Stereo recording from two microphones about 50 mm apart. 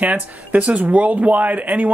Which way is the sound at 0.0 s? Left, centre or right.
Right.